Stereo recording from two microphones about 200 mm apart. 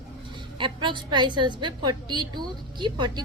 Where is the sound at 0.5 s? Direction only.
25° right (ahead or behind).